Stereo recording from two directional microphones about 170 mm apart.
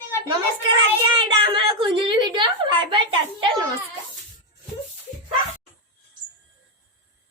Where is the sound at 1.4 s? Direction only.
30° right (ahead or behind).